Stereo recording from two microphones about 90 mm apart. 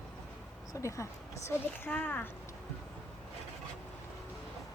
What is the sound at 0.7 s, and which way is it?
Speech, 35° left (ahead or behind).